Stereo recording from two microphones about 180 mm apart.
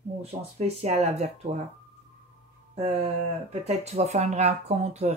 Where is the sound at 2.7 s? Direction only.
35° right (ahead or behind).